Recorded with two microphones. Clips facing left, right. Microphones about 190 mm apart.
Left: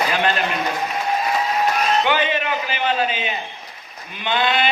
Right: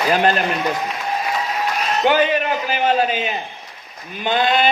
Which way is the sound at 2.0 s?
40° right (ahead or behind).